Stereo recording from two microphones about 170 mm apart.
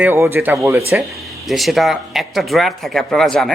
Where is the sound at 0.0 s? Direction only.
15° right (ahead or behind).